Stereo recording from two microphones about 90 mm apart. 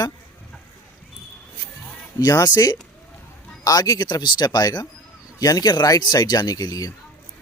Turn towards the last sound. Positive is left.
turn(degrees=45)  # may be behind; listen again after turning